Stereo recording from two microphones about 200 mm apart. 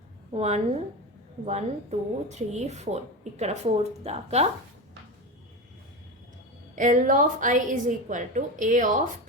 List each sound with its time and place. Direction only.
0.3 s speech: 30° right (ahead or behind)
6.7 s speech: 40° right (ahead or behind)